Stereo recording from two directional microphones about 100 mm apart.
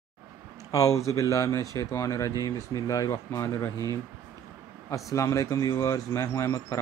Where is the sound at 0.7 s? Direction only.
35° left (ahead or behind).